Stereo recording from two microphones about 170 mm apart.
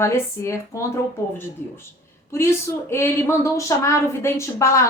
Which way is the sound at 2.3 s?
15° left (ahead or behind).